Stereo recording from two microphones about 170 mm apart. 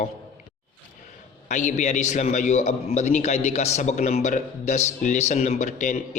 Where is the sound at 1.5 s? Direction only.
45° left (ahead or behind).